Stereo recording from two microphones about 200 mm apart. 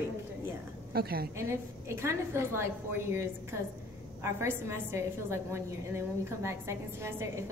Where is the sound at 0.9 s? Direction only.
50° right (ahead or behind).